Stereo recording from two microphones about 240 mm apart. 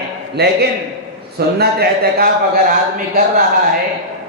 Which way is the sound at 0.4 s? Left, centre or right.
Right.